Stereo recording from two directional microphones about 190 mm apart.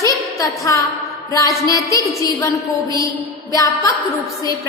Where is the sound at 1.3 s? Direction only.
15° left (ahead or behind).